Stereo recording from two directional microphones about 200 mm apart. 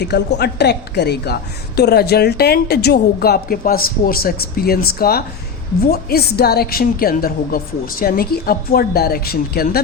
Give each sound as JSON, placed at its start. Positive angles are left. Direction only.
{"t": 0.0, "sound": "a woman's voice", "side_deg": 55}